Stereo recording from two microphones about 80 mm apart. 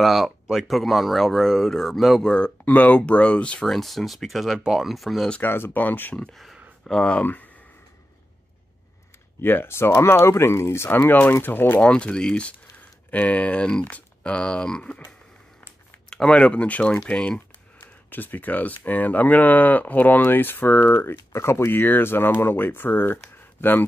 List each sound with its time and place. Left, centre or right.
0.0 s speech: centre
2.3 s speech: centre
5.3 s speech: left
6.2 s a sound: centre
7.0 s speech: centre
9.4 s speech: left
11.9 s speech: centre
16.1 s speech: centre; by 23.8 s left